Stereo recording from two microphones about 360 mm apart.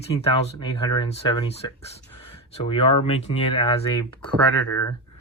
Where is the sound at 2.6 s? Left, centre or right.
Centre.